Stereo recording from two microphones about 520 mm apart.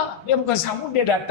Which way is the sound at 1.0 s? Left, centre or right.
Left.